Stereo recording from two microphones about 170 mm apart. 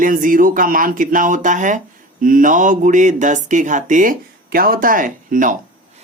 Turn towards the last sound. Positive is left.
turn(degrees=-50)  # may be behind; listen again after turning